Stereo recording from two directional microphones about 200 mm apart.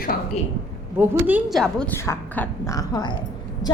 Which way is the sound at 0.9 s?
10° right (ahead or behind).